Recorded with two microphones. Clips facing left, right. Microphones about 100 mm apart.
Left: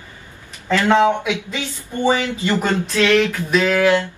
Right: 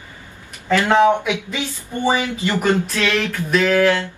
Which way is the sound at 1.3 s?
15° right (ahead or behind).